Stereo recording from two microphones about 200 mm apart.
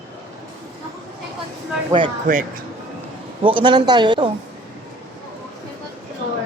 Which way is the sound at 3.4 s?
25° right (ahead or behind).